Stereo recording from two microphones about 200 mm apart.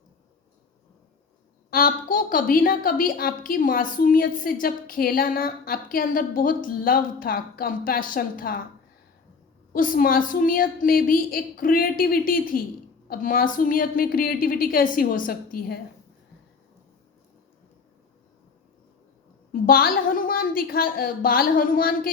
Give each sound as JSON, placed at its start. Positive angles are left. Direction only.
{"t": 1.7, "sound": "a woman's voice", "side_deg": 45}
{"t": 9.7, "sound": "a woman's voice", "side_deg": 45}
{"t": 19.6, "sound": "a woman's voice", "side_deg": 45}